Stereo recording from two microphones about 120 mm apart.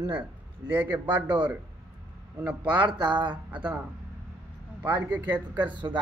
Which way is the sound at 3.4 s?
10° right (ahead or behind).